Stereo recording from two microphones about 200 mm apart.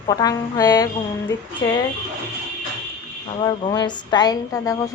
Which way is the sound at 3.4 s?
20° left (ahead or behind).